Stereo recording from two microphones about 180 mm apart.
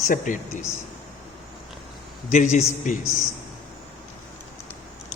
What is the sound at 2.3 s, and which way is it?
Speech, 40° left (ahead or behind).